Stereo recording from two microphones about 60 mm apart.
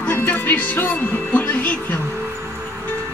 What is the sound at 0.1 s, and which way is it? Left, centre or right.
Music, left.